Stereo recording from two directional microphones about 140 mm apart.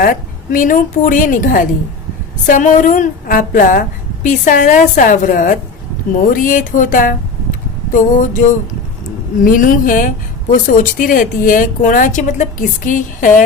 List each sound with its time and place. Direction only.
0.0 s a woman's voice: 75° left (ahead or behind)
7.9 s a sound: 65° left (ahead or behind)
9.4 s a woman's voice: 75° left (ahead or behind)